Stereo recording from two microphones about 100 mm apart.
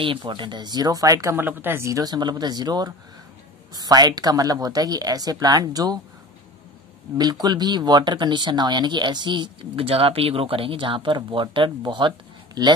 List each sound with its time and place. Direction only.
0.0 s speech: 55° right (ahead or behind); by 1.3 s 35° right (ahead or behind)
1.3 s speech: 20° right (ahead or behind)
1.9 s speech: 40° right (ahead or behind)
7.2 s speech: 45° right (ahead or behind)